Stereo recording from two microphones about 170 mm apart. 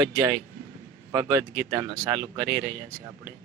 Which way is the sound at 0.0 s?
20° right (ahead or behind).